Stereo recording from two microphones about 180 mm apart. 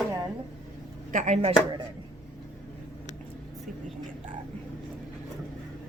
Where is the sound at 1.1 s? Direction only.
40° right (ahead or behind).